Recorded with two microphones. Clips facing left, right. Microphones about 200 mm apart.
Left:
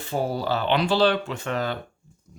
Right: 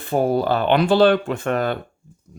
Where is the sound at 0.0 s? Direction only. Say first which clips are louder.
Right 7 dB; 55° right (ahead or behind).